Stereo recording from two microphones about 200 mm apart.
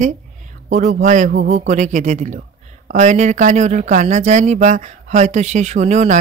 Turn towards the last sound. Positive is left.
turn(degrees=-35)  # may be behind; listen again after turning